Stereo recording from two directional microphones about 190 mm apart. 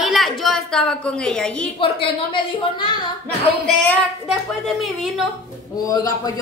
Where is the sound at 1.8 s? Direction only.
25° left (ahead or behind).